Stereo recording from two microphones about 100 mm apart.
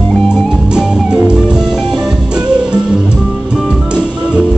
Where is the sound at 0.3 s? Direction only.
10° right (ahead or behind).